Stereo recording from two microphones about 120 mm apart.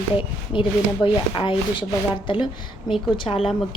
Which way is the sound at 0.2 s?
45° left (ahead or behind).